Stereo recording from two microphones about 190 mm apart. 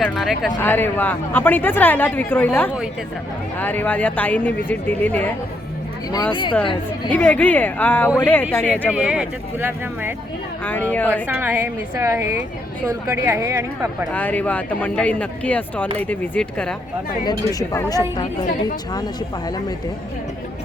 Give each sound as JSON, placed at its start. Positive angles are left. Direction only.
{"t": 0.0, "sound": "speech", "side_deg": 0}
{"t": 0.6, "sound": "speech", "side_deg": 10}
{"t": 7.1, "sound": "speech", "side_deg": 5}
{"t": 8.9, "sound": "speech", "side_deg": -5}
{"t": 10.7, "sound": "speech", "side_deg": 10}
{"t": 11.3, "sound": "speech", "side_deg": -10}
{"t": 14.1, "sound": "speech", "side_deg": 10}
{"t": 17.2, "sound": "speech", "side_deg": 20}